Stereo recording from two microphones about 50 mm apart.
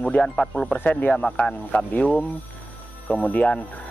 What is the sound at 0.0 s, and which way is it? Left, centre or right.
Speech, centre.